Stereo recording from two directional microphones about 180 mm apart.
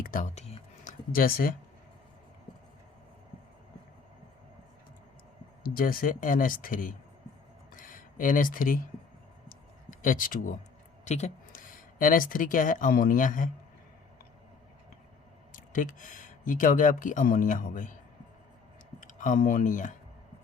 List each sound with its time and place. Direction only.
0.0 s a sound: 45° left (ahead or behind)
1.1 s speech: 55° left (ahead or behind)
5.6 s speech: 50° left (ahead or behind)
7.8 s a sound: 50° left (ahead or behind)
9.5 s clicking: 50° left (ahead or behind)
11.0 s speech: 40° left (ahead or behind)
15.5 s speech: 50° left (ahead or behind)
18.9 s speech: 50° left (ahead or behind)